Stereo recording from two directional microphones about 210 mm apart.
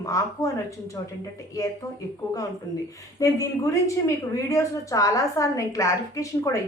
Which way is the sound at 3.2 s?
15° left (ahead or behind).